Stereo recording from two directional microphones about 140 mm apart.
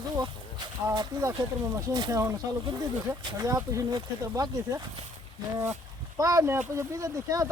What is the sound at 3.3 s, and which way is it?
Speech, 25° right (ahead or behind).